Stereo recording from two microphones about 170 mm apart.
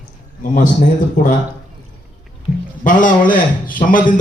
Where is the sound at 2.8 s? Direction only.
50° left (ahead or behind).